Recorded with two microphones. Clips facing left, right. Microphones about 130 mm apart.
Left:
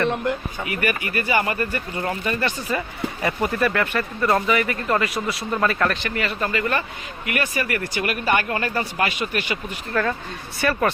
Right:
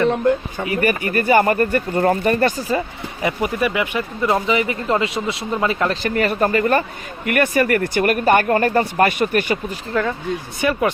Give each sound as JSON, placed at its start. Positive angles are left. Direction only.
{"t": 0.6, "sound": "speech", "side_deg": -35}
{"t": 3.2, "sound": "speech", "side_deg": -15}
{"t": 5.9, "sound": "speech", "side_deg": -40}
{"t": 9.9, "sound": "speech", "side_deg": -20}